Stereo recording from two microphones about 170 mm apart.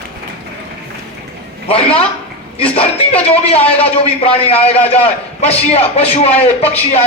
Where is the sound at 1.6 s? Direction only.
35° left (ahead or behind).